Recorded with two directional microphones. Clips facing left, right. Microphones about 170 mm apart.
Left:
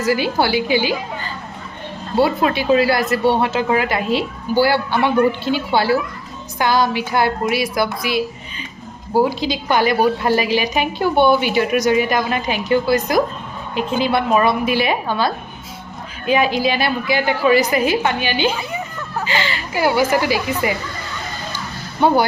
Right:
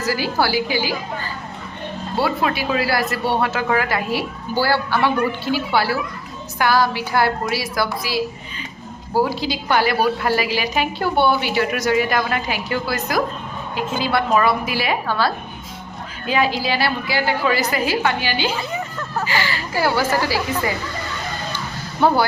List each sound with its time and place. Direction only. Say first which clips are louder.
0.0 s a woman's voice: left 3 dB; 20° left (ahead or behind)